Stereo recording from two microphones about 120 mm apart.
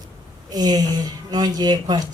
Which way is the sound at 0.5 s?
35° right (ahead or behind).